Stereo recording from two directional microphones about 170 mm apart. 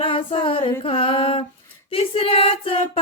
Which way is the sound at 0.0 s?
30° left (ahead or behind).